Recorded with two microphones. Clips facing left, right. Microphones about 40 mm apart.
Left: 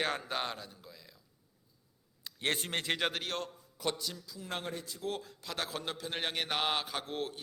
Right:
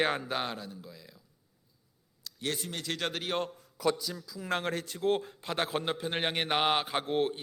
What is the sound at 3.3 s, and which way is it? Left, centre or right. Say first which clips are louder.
Speech: right 6 dB; centre.